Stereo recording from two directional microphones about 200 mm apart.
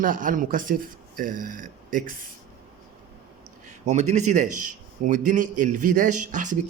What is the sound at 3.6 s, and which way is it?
Speech, 35° right (ahead or behind).